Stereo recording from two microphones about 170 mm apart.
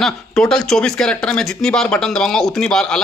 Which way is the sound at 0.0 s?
Centre (ahead or behind).